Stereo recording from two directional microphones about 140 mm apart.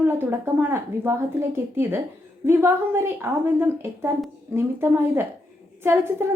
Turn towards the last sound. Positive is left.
turn(degrees=-15)  # may be behind; listen again after turning